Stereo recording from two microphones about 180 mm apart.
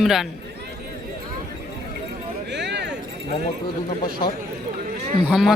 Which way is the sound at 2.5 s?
70° right (ahead or behind).